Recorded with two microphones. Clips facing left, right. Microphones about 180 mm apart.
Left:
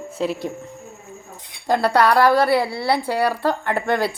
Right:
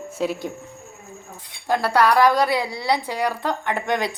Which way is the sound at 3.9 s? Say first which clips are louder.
Left 3 dB; 15° right (ahead or behind).